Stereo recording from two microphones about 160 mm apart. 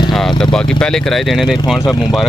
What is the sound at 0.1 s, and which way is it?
Speech, 5° left (ahead or behind).